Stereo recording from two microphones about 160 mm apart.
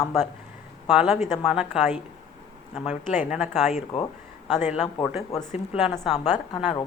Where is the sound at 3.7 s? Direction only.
45° left (ahead or behind).